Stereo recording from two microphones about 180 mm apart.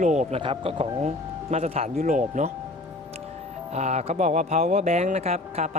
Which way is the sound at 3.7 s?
40° right (ahead or behind).